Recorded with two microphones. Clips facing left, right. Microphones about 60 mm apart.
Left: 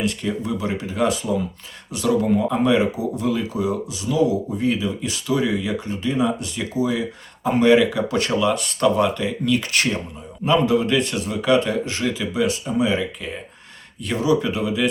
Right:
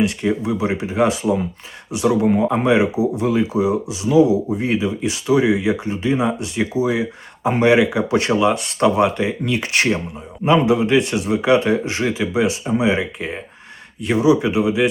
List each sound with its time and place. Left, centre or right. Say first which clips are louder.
0.0 s speech: right 5 dB; right
2.3 s speech: right 2 dB; right
14.0 s speech: right 4 dB; centre